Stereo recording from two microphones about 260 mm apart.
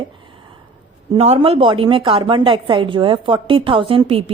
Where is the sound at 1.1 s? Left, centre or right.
Right.